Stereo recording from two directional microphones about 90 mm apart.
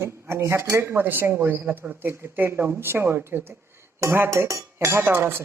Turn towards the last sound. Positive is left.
turn(degrees=-25)  # may be behind; listen again after turning